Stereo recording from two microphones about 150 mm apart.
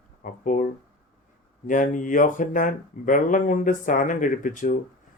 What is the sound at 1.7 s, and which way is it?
Speech, 60° left (ahead or behind).